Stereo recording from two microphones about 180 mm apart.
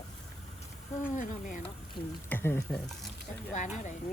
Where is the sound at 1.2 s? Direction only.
45° left (ahead or behind).